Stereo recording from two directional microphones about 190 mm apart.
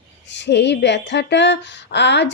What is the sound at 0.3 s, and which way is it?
Speech, 65° left (ahead or behind).